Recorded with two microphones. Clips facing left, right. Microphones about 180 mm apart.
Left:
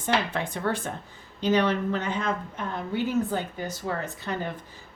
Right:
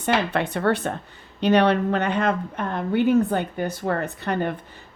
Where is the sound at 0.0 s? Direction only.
70° right (ahead or behind).